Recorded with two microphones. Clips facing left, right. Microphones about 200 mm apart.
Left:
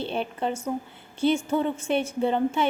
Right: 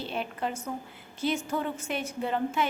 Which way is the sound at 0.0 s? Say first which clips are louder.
Left 4 dB; 30° left (ahead or behind).